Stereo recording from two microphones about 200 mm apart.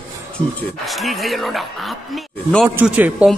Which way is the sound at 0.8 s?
Centre (ahead or behind).